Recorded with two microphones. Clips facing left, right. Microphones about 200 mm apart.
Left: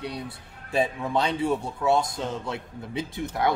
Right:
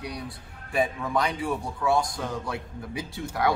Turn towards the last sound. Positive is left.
turn(degrees=25)  # may be behind; listen again after turning